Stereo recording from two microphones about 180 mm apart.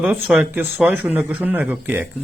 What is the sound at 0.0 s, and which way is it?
Speech, 10° right (ahead or behind).